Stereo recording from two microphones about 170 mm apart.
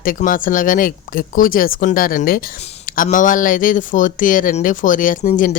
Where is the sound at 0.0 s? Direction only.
55° left (ahead or behind).